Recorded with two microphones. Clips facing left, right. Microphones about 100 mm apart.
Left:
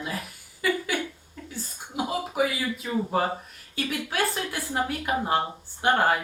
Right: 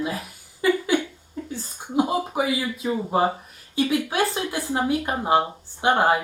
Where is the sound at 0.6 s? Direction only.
25° right (ahead or behind).